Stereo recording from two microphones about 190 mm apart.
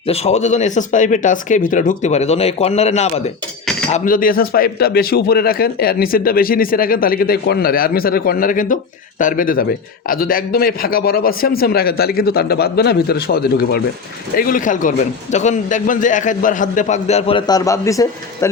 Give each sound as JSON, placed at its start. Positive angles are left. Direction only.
{"t": 0.1, "sound": "a man's voice", "side_deg": 35}
{"t": 3.9, "sound": "a man's voice", "side_deg": 45}